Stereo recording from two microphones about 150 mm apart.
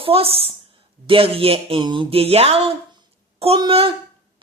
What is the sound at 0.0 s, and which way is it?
A woman's voice, 40° right (ahead or behind).